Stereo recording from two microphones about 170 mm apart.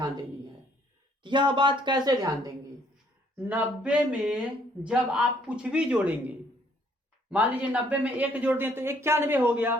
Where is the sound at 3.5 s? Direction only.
10° right (ahead or behind).